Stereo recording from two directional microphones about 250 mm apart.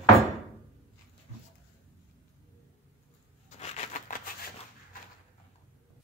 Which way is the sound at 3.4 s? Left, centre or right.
Left.